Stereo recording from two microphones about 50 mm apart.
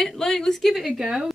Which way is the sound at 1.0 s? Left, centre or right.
Centre.